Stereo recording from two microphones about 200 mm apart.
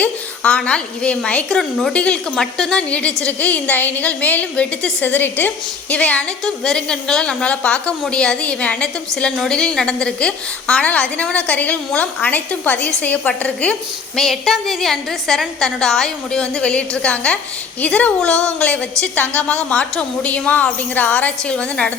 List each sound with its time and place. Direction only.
0.0 s a woman's voice: 5° left (ahead or behind)